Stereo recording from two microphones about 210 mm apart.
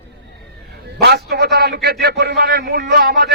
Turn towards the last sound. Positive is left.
turn(degrees=-50)  # may be behind; listen again after turning